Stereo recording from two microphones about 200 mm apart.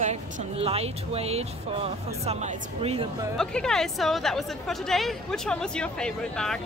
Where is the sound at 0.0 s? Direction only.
30° right (ahead or behind).